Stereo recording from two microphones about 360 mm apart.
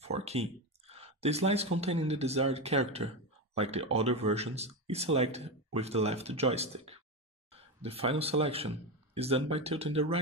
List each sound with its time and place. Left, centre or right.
0.0 s speech: centre